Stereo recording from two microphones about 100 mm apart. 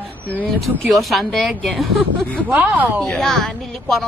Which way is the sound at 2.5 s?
15° right (ahead or behind).